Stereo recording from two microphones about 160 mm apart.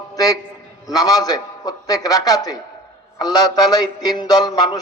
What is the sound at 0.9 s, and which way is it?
A man's voice, 25° left (ahead or behind).